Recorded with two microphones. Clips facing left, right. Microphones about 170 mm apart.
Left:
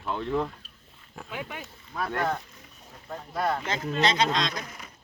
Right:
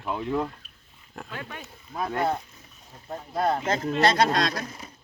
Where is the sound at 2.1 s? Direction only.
30° right (ahead or behind).